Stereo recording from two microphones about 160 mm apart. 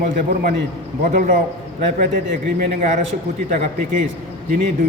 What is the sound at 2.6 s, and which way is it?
A man's voice, 55° right (ahead or behind).